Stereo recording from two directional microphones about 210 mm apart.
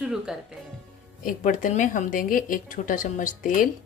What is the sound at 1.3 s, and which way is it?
Speech, 40° left (ahead or behind).